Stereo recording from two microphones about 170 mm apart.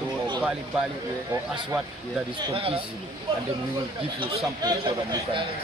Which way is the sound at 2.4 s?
35° right (ahead or behind).